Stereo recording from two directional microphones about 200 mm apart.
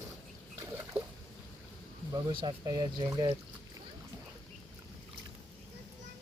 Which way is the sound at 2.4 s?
20° right (ahead or behind).